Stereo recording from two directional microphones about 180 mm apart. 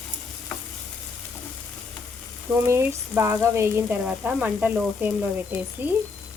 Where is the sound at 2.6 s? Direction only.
15° right (ahead or behind).